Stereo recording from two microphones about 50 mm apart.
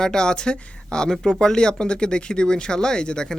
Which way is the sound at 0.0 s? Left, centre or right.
Centre.